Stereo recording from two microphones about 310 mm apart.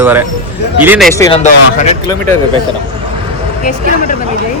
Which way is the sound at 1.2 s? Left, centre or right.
Centre.